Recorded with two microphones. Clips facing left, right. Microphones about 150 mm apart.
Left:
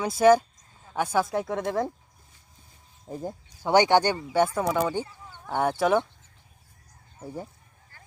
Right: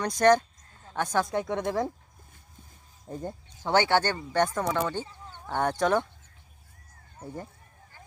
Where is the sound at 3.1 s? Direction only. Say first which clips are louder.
Left 2 dB; 5° left (ahead or behind).